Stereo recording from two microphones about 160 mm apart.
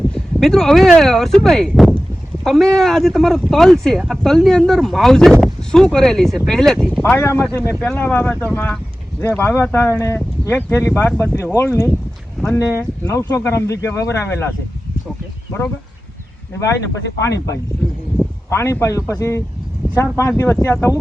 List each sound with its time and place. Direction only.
0.1 s speech: centre (ahead or behind)
7.0 s speech: 15° left (ahead or behind)
16.6 s speech: 20° left (ahead or behind)